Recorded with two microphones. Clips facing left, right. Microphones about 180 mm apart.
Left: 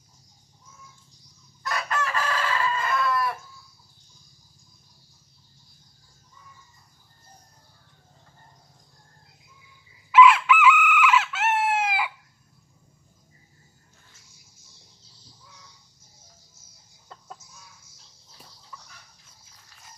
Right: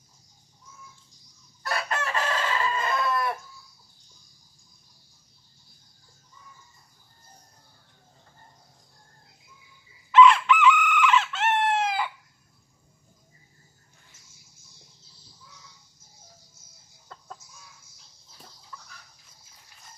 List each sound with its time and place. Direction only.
1.6 s chicken: 30° right (ahead or behind)
10.1 s chicken: 5° left (ahead or behind)